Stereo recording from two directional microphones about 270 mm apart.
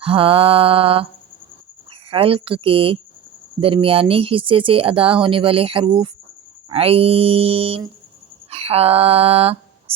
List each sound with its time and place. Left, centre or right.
0.0 s speech: centre